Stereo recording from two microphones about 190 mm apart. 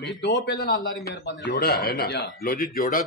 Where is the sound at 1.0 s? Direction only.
65° left (ahead or behind).